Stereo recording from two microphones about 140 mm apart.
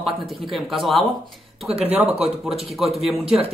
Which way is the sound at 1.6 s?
45° right (ahead or behind).